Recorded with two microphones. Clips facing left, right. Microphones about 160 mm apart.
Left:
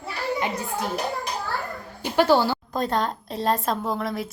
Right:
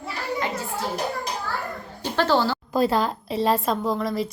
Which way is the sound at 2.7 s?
5° right (ahead or behind).